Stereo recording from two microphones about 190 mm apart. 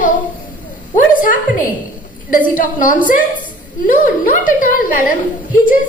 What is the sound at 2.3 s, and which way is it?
Speech, 45° left (ahead or behind).